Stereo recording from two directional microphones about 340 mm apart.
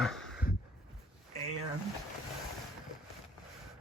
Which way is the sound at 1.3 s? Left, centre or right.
Left.